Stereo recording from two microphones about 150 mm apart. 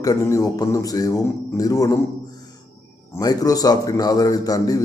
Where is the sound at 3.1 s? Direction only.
25° left (ahead or behind).